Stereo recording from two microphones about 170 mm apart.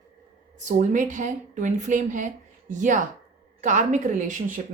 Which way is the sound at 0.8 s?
50° right (ahead or behind).